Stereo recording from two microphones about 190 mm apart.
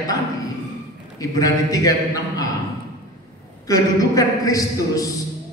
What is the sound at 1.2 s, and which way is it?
A man's voice, 20° left (ahead or behind).